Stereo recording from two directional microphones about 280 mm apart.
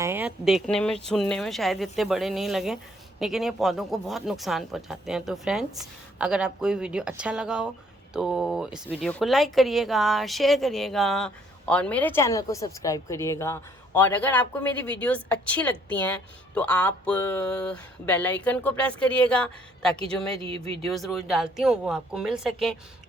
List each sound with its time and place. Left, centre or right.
0.0 s a woman's voice: centre
20.4 s speech: centre
20.8 s speech: centre